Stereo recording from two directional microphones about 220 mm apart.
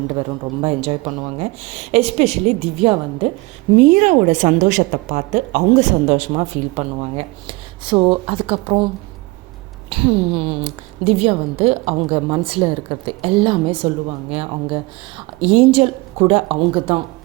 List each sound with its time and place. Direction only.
0.1 s a woman's voice: 25° right (ahead or behind)
9.9 s a woman's voice: 25° right (ahead or behind)